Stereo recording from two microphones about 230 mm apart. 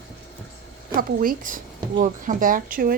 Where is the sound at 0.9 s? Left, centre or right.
Right.